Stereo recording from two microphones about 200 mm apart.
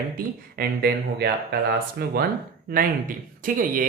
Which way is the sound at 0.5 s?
50° right (ahead or behind).